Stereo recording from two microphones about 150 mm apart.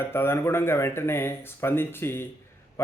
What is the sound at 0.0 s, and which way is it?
Speech, 15° left (ahead or behind).